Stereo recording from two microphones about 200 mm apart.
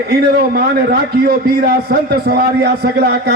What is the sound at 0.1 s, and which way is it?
A man's voice, 50° right (ahead or behind).